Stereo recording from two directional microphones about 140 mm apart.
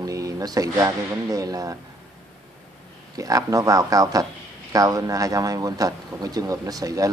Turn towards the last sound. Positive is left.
turn(degrees=-25)  # may be behind; listen again after turning